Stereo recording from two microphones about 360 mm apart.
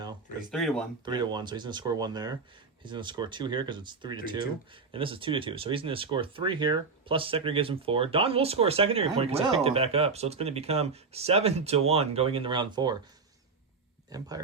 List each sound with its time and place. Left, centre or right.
0.5 s speech: centre
1.0 s speech: centre
14.1 s speech: centre